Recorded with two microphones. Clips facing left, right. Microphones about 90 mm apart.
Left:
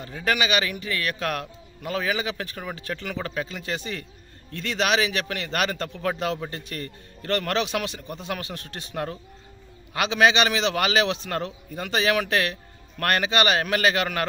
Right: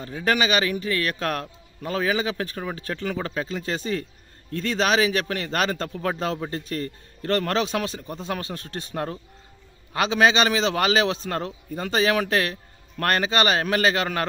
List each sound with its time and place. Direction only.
0.2 s a man's voice: 35° right (ahead or behind)